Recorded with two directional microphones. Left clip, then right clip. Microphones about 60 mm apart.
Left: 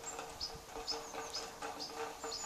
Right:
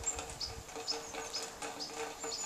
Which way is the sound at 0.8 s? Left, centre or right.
Right.